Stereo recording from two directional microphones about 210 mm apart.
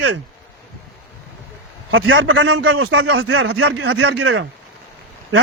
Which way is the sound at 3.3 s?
85° right.